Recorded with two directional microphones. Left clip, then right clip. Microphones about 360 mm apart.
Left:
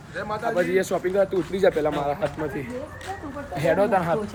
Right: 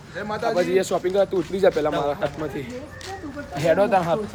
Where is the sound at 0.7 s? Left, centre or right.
Centre.